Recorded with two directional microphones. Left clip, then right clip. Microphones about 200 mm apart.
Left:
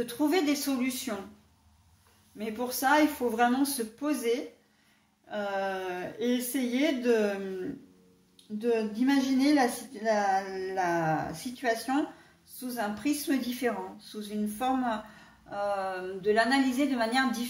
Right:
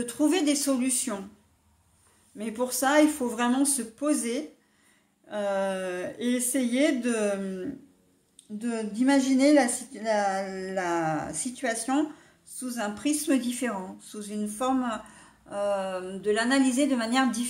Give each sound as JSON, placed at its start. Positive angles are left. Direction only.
{"t": 0.0, "sound": "a woman's voice", "side_deg": -50}
{"t": 2.3, "sound": "a woman's voice", "side_deg": -45}
{"t": 8.5, "sound": "a woman's voice", "side_deg": -45}